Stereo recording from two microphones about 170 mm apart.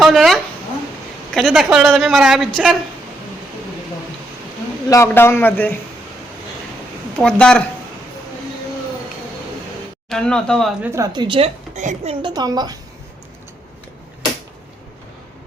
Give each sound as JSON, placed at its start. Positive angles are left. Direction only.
{"t": 0.0, "sound": "a sound", "side_deg": 0}
{"t": 1.3, "sound": "a woman's voice", "side_deg": 0}
{"t": 4.9, "sound": "a man's voice", "side_deg": 15}
{"t": 7.2, "sound": "a woman's voice", "side_deg": 5}
{"t": 10.1, "sound": "a woman's voice", "side_deg": 5}
{"t": 10.8, "sound": "a woman's voice", "side_deg": -20}
{"t": 12.2, "sound": "a woman's voice", "side_deg": -25}